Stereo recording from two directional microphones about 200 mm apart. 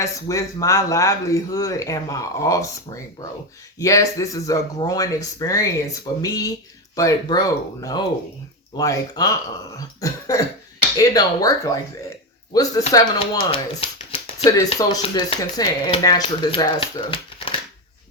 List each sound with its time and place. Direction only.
0.0 s speech: 15° left (ahead or behind)
9.7 s cough: 15° left (ahead or behind)
10.9 s speech: 20° left (ahead or behind)
12.9 s speech: 20° left (ahead or behind)